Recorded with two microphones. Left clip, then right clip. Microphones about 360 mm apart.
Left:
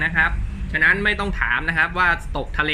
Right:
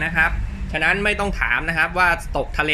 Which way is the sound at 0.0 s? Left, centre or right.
Centre.